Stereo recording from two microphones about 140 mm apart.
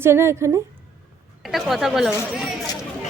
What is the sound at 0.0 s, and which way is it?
Speech, 20° right (ahead or behind).